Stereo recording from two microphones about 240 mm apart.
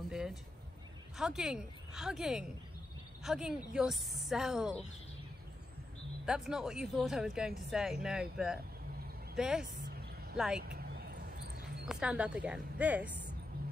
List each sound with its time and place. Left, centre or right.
0.1 s speech: centre
6.2 s speech: centre
9.8 s a sound: right
10.3 s speech: centre
10.6 s a sound: right
11.9 s speech: centre
13.5 s music: right